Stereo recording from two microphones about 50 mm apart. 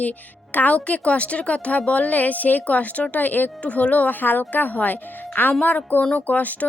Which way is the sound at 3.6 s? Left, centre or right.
Left.